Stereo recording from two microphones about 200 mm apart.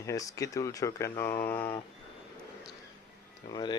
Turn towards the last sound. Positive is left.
turn(degrees=20)  # may be behind; listen again after turning